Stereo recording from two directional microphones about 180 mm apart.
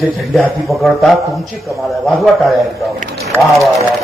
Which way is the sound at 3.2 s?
15° right (ahead or behind).